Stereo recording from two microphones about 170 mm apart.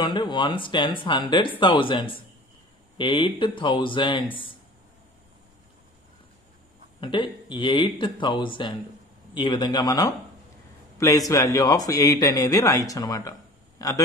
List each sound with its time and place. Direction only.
0.0 s speech: 25° left (ahead or behind)
7.0 s speech: 30° left (ahead or behind)